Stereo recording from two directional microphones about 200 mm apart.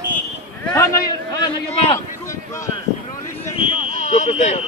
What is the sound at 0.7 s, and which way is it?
Speech, 15° left (ahead or behind).